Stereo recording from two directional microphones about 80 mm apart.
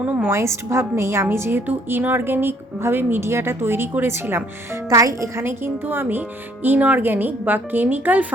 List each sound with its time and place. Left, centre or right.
0.0 s a woman's voice: centre
0.3 s a woman's voice: right
4.9 s a woman's voice: right
5.4 s a woman's voice: right